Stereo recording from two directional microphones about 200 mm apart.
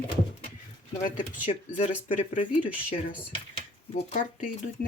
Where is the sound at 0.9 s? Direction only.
40° left (ahead or behind).